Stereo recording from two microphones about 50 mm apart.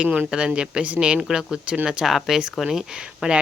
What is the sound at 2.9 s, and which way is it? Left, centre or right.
Speech, centre.